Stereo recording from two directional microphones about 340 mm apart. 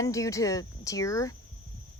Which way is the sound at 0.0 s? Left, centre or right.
Centre.